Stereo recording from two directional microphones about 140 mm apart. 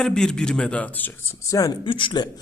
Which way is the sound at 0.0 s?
5° left (ahead or behind).